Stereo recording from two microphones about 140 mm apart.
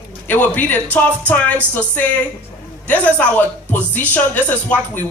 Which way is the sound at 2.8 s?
10° left (ahead or behind).